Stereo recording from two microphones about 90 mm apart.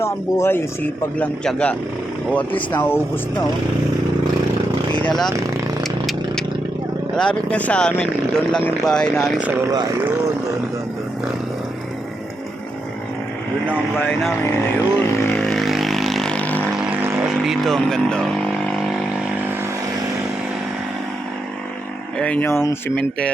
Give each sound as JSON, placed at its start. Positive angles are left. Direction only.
{"t": 0.0, "sound": "speech", "side_deg": 30}
{"t": 1.5, "sound": "speech", "side_deg": 10}
{"t": 5.0, "sound": "speech", "side_deg": 5}
{"t": 5.8, "sound": "a sound", "side_deg": 0}
{"t": 7.2, "sound": "speech", "side_deg": 10}
{"t": 14.9, "sound": "vehicle", "side_deg": 5}
{"t": 16.2, "sound": "vehicle", "side_deg": 15}
{"t": 16.7, "sound": "vehicle", "side_deg": -10}
{"t": 22.2, "sound": "speech", "side_deg": 15}
{"t": 22.4, "sound": "speech", "side_deg": 25}